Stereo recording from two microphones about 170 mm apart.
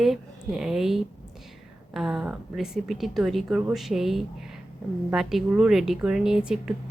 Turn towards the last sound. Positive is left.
turn(degrees=-5)  # may be behind; listen again after turning